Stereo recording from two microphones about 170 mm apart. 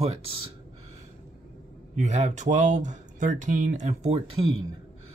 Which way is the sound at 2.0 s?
40° right (ahead or behind).